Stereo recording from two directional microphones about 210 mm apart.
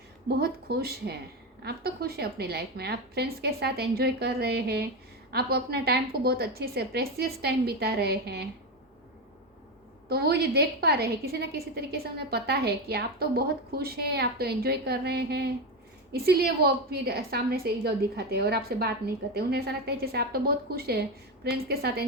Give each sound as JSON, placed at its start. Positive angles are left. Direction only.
{"t": 0.3, "sound": "a woman's voice", "side_deg": -50}
{"t": 10.1, "sound": "a woman's voice", "side_deg": -50}